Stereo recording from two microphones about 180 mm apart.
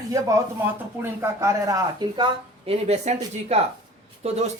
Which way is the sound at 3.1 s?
40° right (ahead or behind).